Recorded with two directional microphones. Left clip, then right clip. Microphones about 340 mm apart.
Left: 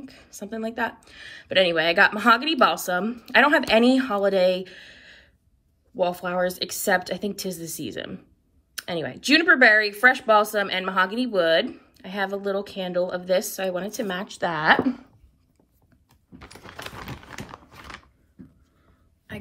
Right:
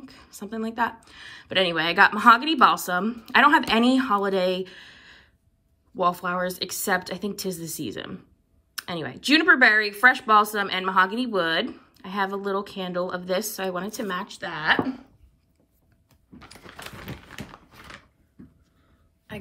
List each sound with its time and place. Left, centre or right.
0.0 s speech: centre
16.6 s typewriter: centre